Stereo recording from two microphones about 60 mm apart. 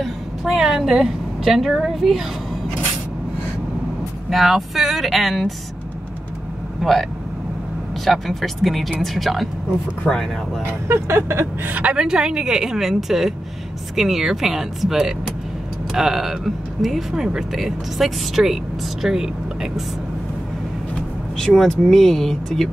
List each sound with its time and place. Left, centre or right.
0.0 s a woman's voice: centre
4.3 s speech: centre
6.8 s speech: centre
10.6 s speech: right
11.7 s a woman's voice: right
12.0 s a woman's voice: centre
21.4 s speech: centre